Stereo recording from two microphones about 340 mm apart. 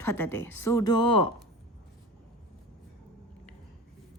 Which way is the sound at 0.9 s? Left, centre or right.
Left.